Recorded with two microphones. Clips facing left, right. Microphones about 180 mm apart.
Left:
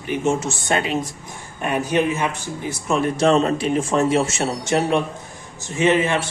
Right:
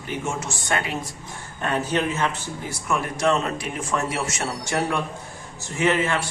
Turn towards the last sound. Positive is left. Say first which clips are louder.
# left 4 dB
turn(degrees=20)  # may be behind; listen again after turning